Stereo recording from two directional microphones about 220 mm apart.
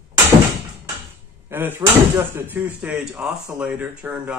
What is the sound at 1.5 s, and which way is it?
Speech, 10° right (ahead or behind).